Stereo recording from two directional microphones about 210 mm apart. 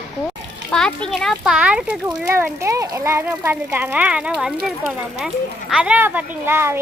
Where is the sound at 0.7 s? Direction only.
5° left (ahead or behind).